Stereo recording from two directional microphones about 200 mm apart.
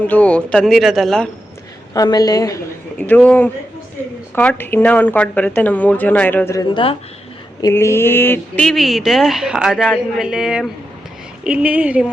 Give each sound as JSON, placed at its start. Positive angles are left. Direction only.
{"t": 0.0, "sound": "speech", "side_deg": 10}
{"t": 1.9, "sound": "a woman's voice", "side_deg": 20}
{"t": 3.0, "sound": "speech", "side_deg": 10}